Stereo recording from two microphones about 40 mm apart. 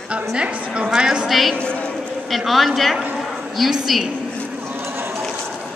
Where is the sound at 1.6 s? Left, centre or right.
Left.